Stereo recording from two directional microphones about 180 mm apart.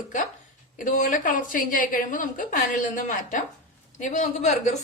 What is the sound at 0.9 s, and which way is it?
A woman's voice, 45° left (ahead or behind).